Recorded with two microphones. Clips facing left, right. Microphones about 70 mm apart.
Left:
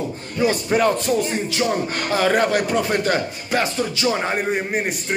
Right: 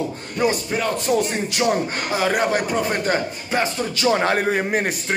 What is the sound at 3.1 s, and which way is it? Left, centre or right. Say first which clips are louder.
Speech: left 1 dB; right.